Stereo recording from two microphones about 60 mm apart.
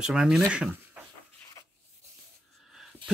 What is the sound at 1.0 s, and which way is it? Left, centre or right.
Dog, right.